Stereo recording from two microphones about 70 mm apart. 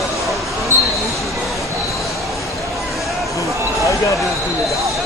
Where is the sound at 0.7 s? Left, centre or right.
Right.